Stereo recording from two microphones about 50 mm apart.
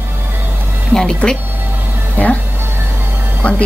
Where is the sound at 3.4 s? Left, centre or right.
Left.